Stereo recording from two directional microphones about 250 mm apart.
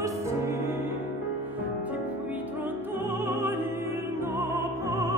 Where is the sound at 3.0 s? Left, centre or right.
Centre.